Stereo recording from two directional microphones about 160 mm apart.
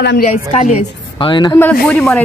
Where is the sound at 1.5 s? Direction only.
10° left (ahead or behind).